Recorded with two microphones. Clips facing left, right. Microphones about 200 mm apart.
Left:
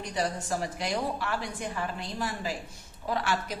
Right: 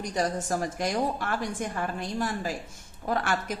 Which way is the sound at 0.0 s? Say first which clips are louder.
Right 3 dB; 45° right (ahead or behind).